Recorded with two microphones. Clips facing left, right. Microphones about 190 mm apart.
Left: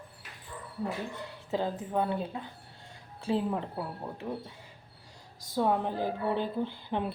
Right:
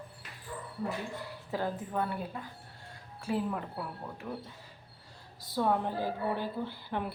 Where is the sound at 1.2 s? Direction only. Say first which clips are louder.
Left 4 dB; 20° left (ahead or behind).